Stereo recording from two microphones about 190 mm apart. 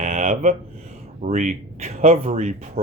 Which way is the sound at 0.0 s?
35° right (ahead or behind).